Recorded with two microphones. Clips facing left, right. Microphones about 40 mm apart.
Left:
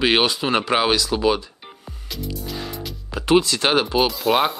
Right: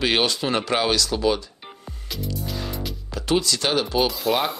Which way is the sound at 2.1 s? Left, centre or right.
Centre.